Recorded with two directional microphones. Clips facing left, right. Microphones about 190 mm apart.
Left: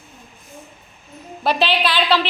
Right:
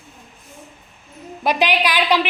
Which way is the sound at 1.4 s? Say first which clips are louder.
Even; 15° right (ahead or behind).